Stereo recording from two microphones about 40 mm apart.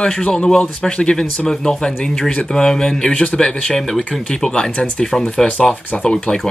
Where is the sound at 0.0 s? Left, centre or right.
Left.